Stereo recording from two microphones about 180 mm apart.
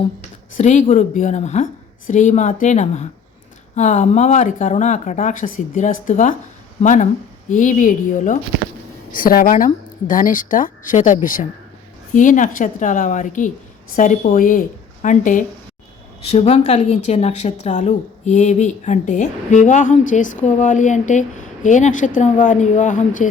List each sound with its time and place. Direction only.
0.5 s a woman's voice: 40° left (ahead or behind)